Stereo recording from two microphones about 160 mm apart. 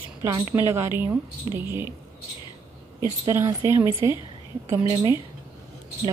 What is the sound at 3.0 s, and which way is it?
A woman's voice, 15° right (ahead or behind).